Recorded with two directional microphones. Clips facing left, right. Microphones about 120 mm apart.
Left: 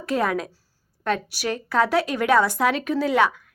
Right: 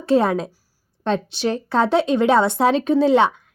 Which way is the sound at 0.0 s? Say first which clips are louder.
Right 6 dB; 30° right (ahead or behind).